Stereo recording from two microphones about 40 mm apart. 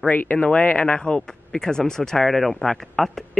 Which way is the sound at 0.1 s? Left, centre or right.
Left.